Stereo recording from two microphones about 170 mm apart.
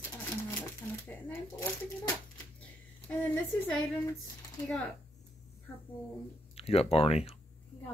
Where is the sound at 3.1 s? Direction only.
10° left (ahead or behind).